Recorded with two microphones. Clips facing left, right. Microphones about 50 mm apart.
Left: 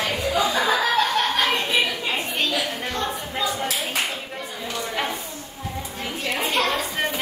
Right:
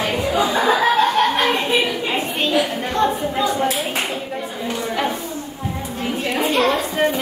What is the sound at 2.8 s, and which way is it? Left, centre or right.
Speech, right.